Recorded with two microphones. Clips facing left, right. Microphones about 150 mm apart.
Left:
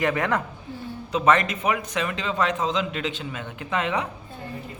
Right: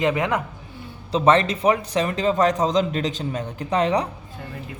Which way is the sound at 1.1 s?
30° right (ahead or behind).